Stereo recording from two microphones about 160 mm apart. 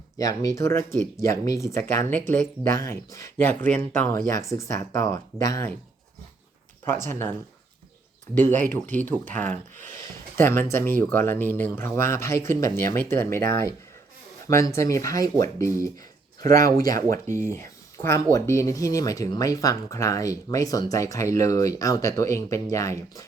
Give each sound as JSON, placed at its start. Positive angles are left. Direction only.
{"t": 0.2, "sound": "speech", "side_deg": 20}
{"t": 6.8, "sound": "speech", "side_deg": 15}
{"t": 8.4, "sound": "speech", "side_deg": 10}
{"t": 16.4, "sound": "speech", "side_deg": -60}
{"t": 16.6, "sound": "speech", "side_deg": 20}